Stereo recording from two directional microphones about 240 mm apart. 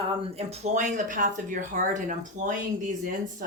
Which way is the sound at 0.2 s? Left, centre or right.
Right.